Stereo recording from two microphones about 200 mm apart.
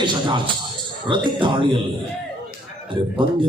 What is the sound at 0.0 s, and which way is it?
A man's voice, 25° right (ahead or behind).